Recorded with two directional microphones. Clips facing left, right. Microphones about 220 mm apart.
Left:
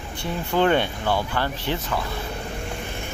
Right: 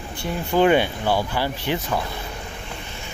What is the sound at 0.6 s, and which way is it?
Speech, 10° right (ahead or behind).